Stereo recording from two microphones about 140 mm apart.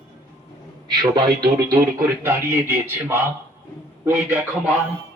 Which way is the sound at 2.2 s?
15° right (ahead or behind).